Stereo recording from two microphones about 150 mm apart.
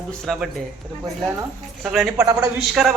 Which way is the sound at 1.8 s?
Centre (ahead or behind).